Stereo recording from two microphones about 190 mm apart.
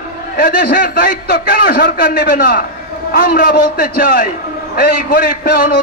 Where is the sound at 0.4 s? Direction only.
50° left (ahead or behind).